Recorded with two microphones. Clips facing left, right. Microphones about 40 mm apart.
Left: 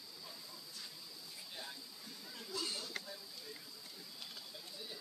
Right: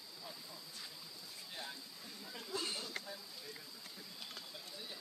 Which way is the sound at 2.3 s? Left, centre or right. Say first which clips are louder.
Right 1 dB; right.